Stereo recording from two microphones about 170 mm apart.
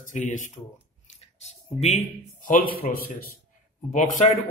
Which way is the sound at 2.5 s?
60° left (ahead or behind).